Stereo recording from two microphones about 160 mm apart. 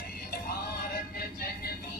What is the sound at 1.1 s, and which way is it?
Music, 75° left (ahead or behind).